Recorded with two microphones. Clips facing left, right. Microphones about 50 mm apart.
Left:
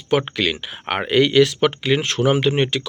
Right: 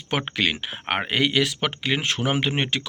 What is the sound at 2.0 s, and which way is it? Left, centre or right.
Speech, centre.